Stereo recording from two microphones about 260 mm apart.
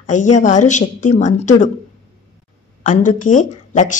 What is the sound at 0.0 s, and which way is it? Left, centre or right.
Speech, left.